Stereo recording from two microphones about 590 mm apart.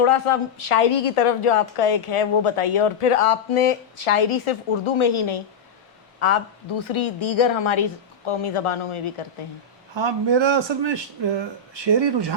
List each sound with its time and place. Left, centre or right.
0.0 s a woman's voice: left
9.9 s a man's voice: right